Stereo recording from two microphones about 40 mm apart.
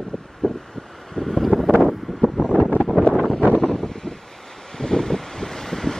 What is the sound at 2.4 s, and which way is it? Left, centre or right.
Wind noise, left.